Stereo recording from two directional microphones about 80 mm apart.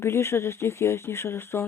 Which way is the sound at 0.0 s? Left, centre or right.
Left.